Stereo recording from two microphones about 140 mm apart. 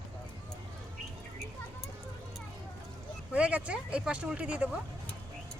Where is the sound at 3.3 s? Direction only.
10° right (ahead or behind).